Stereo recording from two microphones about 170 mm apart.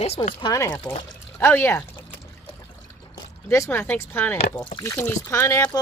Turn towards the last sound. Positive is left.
turn(degrees=20)  # may be behind; listen again after turning